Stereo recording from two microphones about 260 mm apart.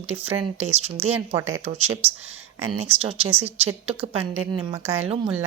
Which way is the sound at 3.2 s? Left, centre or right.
Centre.